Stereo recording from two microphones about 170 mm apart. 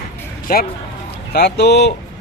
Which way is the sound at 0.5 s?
60° left (ahead or behind).